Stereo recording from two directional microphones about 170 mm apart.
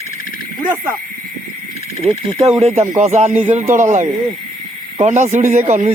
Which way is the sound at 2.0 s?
5° left (ahead or behind).